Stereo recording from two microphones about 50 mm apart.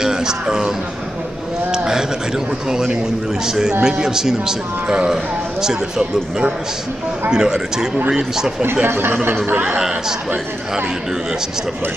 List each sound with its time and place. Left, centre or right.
0.0 s a man's voice: centre
8.8 s speech: right
9.7 s speech: centre